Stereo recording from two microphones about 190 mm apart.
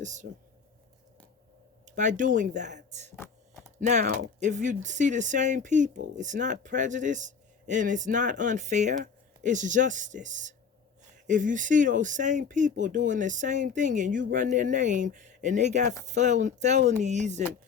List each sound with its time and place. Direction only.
0.0 s speech: 40° right (ahead or behind)
2.0 s speech: 40° right (ahead or behind)